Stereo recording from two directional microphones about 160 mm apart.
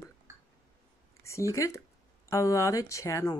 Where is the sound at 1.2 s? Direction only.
20° left (ahead or behind).